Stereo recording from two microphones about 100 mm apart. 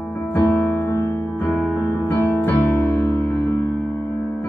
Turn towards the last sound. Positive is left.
turn(degrees=15)  # may be behind; listen again after turning